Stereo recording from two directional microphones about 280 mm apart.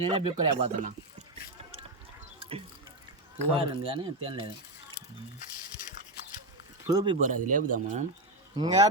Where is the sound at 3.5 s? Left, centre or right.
Centre.